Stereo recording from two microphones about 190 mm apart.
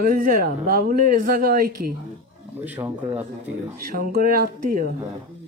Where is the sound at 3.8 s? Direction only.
50° right (ahead or behind).